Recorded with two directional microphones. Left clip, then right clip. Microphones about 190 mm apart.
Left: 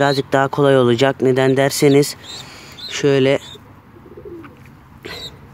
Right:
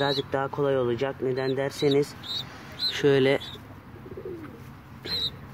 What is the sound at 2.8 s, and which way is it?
Speech, 30° left (ahead or behind).